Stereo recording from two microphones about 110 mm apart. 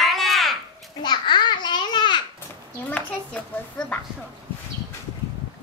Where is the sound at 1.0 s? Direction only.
45° left (ahead or behind).